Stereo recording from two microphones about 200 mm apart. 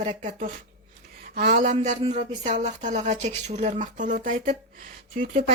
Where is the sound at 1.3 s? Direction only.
45° right (ahead or behind).